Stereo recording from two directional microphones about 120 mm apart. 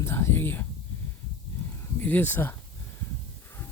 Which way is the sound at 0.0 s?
20° left (ahead or behind).